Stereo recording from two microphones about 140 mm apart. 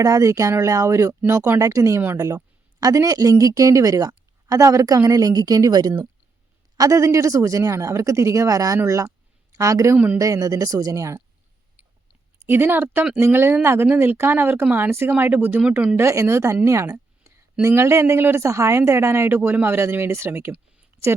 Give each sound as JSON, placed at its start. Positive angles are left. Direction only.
{"t": 0.0, "sound": "a woman's voice", "side_deg": -25}
{"t": 12.5, "sound": "a woman's voice", "side_deg": -15}